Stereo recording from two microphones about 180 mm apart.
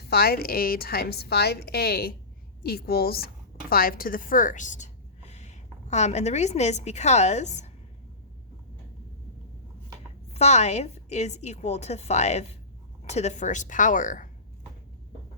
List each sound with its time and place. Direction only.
0.0 s a woman's voice: 60° left (ahead or behind); by 7.7 s 40° left (ahead or behind)
10.3 s a woman's voice: 40° left (ahead or behind)